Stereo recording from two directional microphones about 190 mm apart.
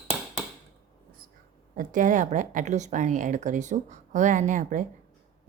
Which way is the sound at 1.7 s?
45° right (ahead or behind).